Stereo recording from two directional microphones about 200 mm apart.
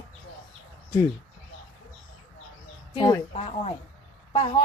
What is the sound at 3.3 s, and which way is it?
Speech, 30° left (ahead or behind).